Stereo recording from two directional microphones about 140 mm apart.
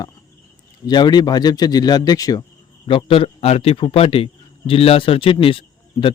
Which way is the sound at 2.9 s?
40° left (ahead or behind).